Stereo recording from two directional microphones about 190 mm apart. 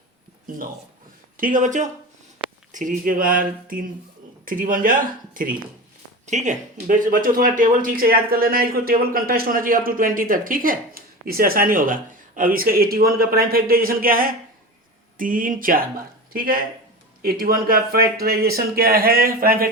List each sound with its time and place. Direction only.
1.4 s speech: 45° right (ahead or behind)